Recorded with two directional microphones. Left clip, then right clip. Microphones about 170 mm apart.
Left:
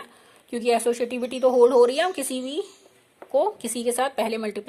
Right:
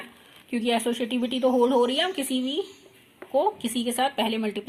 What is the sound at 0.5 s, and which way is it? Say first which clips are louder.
A woman's voice: left 4 dB; 65° left (ahead or behind).